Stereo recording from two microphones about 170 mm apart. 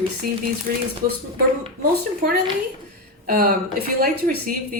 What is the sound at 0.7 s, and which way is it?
Speech, 65° right (ahead or behind).